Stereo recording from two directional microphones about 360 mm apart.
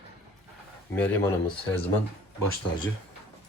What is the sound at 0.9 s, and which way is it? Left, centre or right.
Speech, centre.